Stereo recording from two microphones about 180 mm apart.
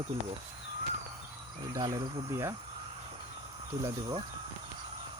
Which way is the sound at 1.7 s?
20° right (ahead or behind).